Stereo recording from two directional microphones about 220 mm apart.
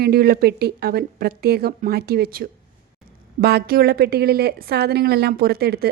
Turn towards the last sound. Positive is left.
turn(degrees=-45)  # may be behind; listen again after turning